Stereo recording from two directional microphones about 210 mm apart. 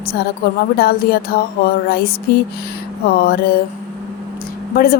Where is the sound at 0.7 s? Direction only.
45° left (ahead or behind).